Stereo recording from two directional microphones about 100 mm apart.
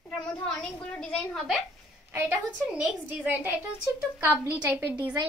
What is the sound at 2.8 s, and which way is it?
A woman's voice, 15° right (ahead or behind).